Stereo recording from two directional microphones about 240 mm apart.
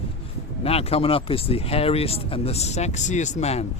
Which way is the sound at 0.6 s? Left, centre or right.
Left.